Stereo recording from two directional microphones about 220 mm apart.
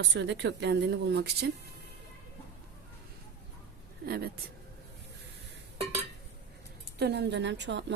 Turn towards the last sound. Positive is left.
turn(degrees=-50)  # may be behind; listen again after turning